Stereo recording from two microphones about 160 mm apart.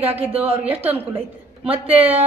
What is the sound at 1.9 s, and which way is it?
Speech, 35° right (ahead or behind).